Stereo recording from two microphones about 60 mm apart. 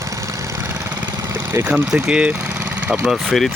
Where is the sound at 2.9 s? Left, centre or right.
Centre.